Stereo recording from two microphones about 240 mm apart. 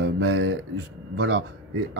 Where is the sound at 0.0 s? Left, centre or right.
Right.